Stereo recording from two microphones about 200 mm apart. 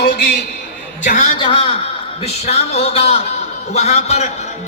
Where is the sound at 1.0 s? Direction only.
40° left (ahead or behind).